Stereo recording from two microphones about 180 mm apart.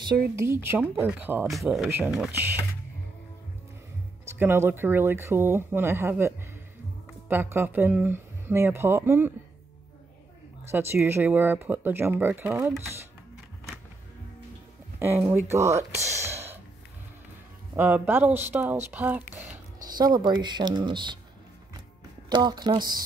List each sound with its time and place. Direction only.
0.4 s speech: 15° right (ahead or behind)
1.5 s speech: centre (ahead or behind)
4.3 s speech: 10° right (ahead or behind)
10.7 s speech: 15° right (ahead or behind)
15.0 s speech: 10° right (ahead or behind)
16.2 s gasp: 15° right (ahead or behind)
17.7 s speech: 10° right (ahead or behind)
19.8 s speech: 20° right (ahead or behind)
22.3 s speech: 25° right (ahead or behind)